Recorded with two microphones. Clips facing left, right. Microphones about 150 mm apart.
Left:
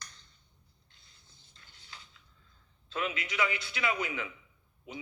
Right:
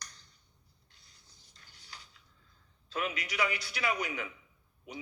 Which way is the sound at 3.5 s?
25° left (ahead or behind).